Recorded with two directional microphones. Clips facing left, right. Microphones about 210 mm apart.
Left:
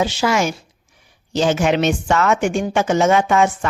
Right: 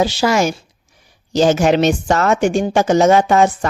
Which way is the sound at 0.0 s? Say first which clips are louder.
Right 3 dB; 35° right (ahead or behind).